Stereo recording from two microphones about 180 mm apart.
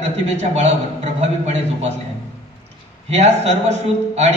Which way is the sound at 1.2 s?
35° right (ahead or behind).